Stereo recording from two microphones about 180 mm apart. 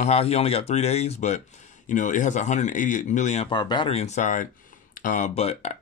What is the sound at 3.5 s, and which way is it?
Speech, 25° left (ahead or behind).